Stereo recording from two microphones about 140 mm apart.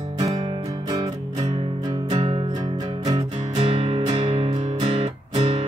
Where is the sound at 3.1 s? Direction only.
45° right (ahead or behind).